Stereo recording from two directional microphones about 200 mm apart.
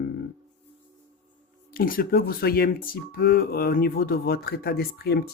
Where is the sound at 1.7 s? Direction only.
45° left (ahead or behind).